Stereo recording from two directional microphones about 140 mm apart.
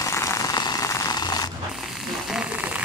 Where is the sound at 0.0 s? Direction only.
20° left (ahead or behind).